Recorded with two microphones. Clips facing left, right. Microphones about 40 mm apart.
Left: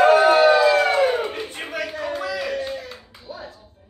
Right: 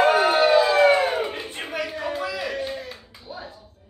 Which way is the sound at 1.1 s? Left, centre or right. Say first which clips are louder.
Left 2 dB; centre.